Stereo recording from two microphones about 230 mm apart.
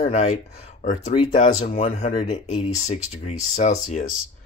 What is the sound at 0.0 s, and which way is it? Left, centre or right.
Speech, left.